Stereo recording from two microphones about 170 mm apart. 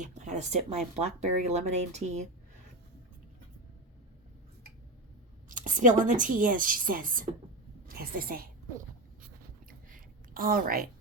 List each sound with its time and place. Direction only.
0.0 s speech: 45° right (ahead or behind)
5.5 s a woman's voice: 50° right (ahead or behind)
9.2 s writing: 55° right (ahead or behind)